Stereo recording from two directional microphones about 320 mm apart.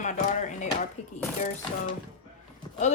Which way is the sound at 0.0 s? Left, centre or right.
Left.